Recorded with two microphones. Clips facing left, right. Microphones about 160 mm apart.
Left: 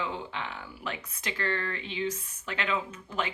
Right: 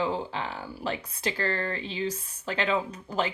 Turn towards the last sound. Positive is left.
turn(degrees=-35)  # may be behind; listen again after turning